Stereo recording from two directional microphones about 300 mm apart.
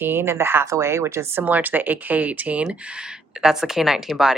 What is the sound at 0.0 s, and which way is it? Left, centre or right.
Speech, centre.